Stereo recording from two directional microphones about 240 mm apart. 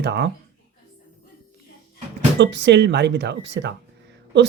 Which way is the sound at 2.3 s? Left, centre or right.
Right.